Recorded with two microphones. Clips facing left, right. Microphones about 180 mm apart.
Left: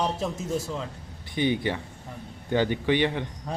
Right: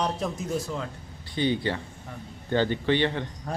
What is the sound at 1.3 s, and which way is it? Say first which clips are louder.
A man's voice: left 1 dB; 15° left (ahead or behind).